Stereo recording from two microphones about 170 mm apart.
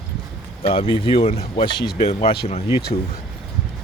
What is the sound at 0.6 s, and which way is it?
Speech, 35° left (ahead or behind).